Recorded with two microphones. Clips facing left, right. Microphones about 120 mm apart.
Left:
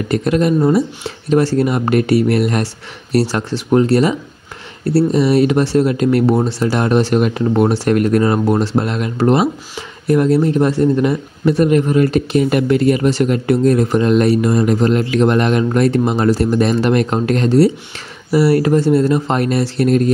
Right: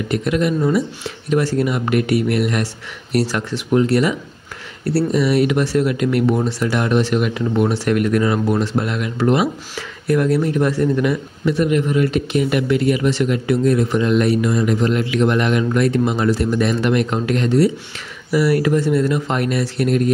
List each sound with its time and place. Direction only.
0.1 s speech: 40° left (ahead or behind)
9.8 s speech: 25° left (ahead or behind)